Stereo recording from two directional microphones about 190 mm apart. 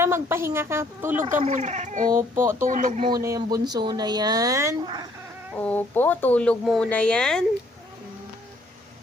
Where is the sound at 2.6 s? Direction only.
45° right (ahead or behind).